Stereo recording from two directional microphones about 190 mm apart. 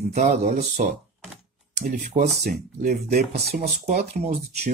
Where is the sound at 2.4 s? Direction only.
50° right (ahead or behind).